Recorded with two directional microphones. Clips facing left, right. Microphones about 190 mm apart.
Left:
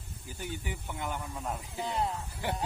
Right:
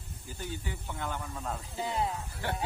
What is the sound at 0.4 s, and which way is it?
Speech, 15° left (ahead or behind).